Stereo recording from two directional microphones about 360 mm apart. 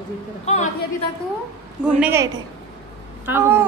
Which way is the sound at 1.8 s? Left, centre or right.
Centre.